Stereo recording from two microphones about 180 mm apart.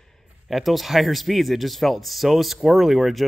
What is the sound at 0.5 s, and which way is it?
Speech, centre (ahead or behind).